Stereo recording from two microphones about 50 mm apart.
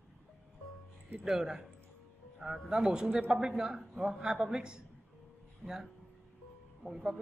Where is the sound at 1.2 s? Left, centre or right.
Centre.